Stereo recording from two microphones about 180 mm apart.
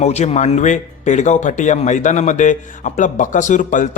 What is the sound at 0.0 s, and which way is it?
A man's voice, 40° left (ahead or behind).